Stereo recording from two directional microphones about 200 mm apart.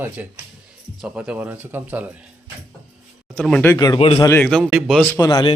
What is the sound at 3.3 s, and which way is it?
Speech, 5° left (ahead or behind).